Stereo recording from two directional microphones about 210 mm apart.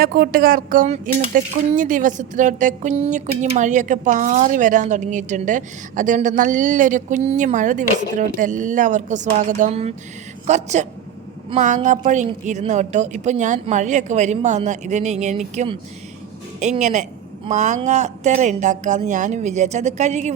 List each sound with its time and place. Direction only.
0.0 s speech: 45° right (ahead or behind)